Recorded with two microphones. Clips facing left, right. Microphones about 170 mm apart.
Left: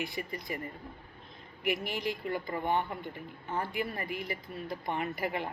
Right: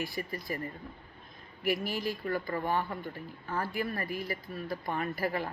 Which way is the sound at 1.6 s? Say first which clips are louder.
Right 1 dB; 20° left (ahead or behind).